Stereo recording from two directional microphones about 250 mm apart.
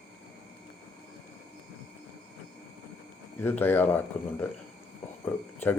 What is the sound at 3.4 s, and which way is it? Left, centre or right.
Speech, centre.